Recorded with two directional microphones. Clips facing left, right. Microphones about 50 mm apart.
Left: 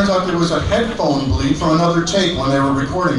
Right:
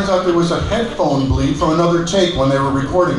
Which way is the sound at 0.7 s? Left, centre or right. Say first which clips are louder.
Right 1 dB; right.